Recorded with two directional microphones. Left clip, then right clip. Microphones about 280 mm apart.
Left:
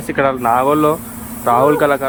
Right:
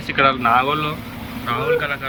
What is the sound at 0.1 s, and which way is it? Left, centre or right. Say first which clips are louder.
Speech: left 1 dB; centre.